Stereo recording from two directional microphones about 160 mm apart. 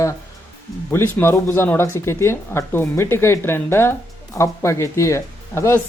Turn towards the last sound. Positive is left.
turn(degrees=15)  # may be behind; listen again after turning